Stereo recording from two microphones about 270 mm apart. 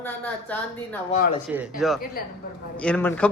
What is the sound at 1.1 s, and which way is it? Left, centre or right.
Speech, left.